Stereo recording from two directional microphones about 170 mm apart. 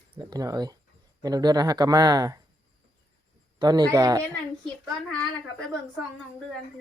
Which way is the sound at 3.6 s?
25° right (ahead or behind).